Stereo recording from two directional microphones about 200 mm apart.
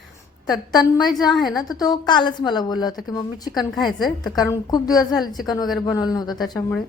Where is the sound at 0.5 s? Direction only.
20° left (ahead or behind).